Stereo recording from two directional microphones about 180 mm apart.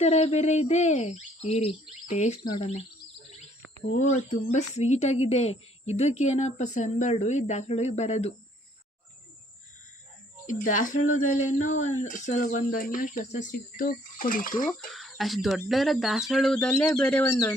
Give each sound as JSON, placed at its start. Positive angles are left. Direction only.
{"t": 0.0, "sound": "a woman's voice", "side_deg": 35}
{"t": 3.9, "sound": "a woman's voice", "side_deg": 40}
{"t": 10.4, "sound": "speech", "side_deg": 45}
{"t": 14.9, "sound": "speech", "side_deg": 0}